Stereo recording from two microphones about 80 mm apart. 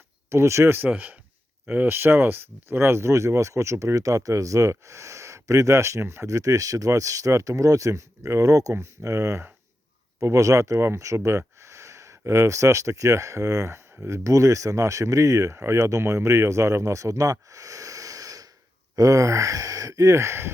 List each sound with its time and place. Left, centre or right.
0.3 s speech: right
0.8 s speech: right
17.5 s a sound: right
18.9 s speech: right